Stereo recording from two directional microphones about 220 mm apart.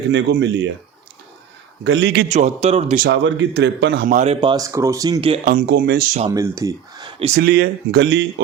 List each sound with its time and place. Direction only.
0.1 s a man's voice: 50° right (ahead or behind)
1.8 s a man's voice: 55° right (ahead or behind)
2.3 s speech: 30° right (ahead or behind)
3.1 s a man's voice: 55° right (ahead or behind); by 4.4 s 35° right (ahead or behind)
4.4 s speech: 20° right (ahead or behind)
5.5 s a man's voice: 45° right (ahead or behind)
6.6 s speech: 15° right (ahead or behind)
7.3 s a man's voice: 50° right (ahead or behind)